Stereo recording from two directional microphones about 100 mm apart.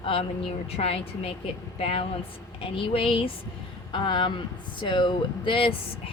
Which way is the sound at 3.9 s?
50° left (ahead or behind).